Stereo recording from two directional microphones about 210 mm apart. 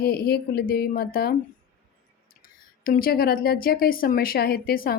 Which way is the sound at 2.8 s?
45° left (ahead or behind).